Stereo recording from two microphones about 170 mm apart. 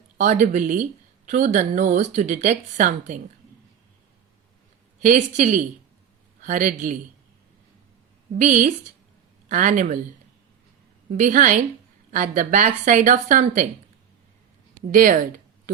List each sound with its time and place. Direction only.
0.2 s speech: 50° right (ahead or behind)
5.0 s speech: 45° right (ahead or behind)
8.4 s speech: 50° right (ahead or behind)
11.1 s speech: 50° right (ahead or behind)
14.8 s speech: 55° right (ahead or behind)